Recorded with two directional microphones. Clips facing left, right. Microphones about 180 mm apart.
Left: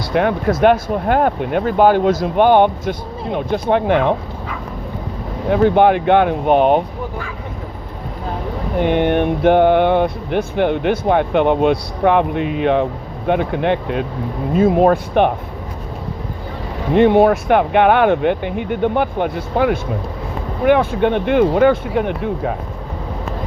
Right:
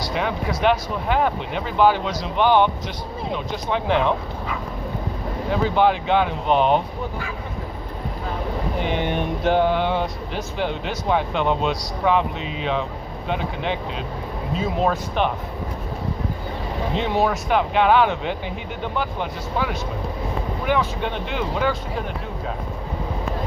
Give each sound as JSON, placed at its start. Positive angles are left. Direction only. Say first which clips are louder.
{"t": 0.1, "sound": "speech", "louder": "left 10 dB", "side_deg": 55}
{"t": 5.5, "sound": "speech", "louder": "left 7 dB", "side_deg": 60}
{"t": 8.8, "sound": "speech", "louder": "left 10 dB", "side_deg": 60}
{"t": 16.9, "sound": "speech", "louder": "left 11 dB", "side_deg": 55}